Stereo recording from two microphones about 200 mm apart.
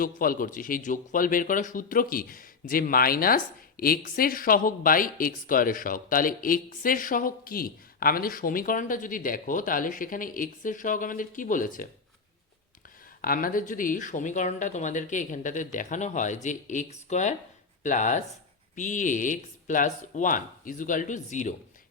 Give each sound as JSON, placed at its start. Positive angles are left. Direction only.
{"t": 0.0, "sound": "a man's voice", "side_deg": 45}
{"t": 13.2, "sound": "speech", "side_deg": 45}